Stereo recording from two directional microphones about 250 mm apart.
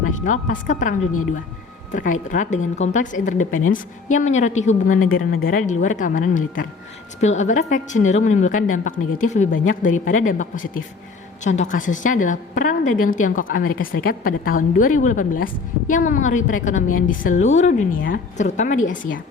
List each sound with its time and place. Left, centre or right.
0.3 s a woman's voice: left